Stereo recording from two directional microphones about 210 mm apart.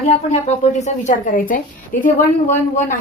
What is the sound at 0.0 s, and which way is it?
A woman's voice, 30° left (ahead or behind).